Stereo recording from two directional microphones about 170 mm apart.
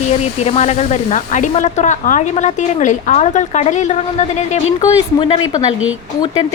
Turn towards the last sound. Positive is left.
turn(degrees=35)  # may be behind; listen again after turning